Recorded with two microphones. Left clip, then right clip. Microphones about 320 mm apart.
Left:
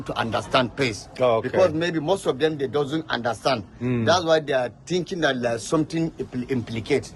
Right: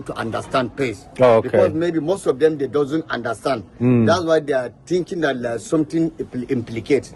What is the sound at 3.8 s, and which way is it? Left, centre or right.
Speech, centre.